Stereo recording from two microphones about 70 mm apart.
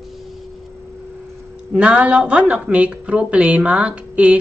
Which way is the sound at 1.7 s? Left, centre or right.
Centre.